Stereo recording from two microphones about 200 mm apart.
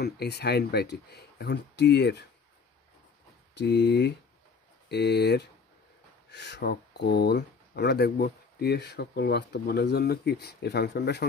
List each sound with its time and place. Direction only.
0.0 s speech: 55° left (ahead or behind)
3.5 s speech: 60° left (ahead or behind)